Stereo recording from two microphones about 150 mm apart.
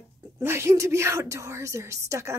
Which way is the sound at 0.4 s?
15° right (ahead or behind).